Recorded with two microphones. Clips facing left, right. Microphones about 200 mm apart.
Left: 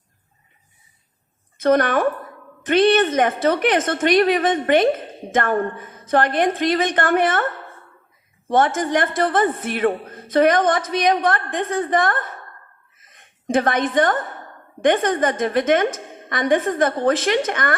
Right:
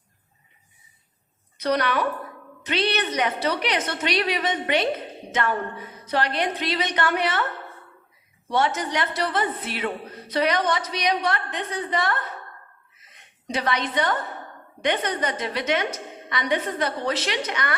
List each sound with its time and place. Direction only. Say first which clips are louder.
1.5 s a woman's voice: left 6 dB; 50° left (ahead or behind)
13.0 s a sound: left 2 dB; 50° left (ahead or behind)
14.8 s a woman's voice: left 7 dB; 50° left (ahead or behind)